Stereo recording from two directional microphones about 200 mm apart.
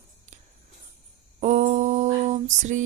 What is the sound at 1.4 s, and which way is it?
Female singing, 40° right (ahead or behind).